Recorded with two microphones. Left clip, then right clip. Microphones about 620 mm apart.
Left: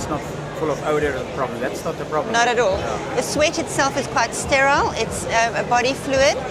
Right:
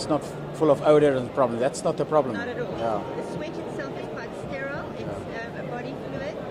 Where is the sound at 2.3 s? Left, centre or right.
Left.